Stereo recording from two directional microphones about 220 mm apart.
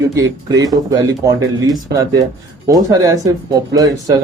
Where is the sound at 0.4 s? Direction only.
15° right (ahead or behind).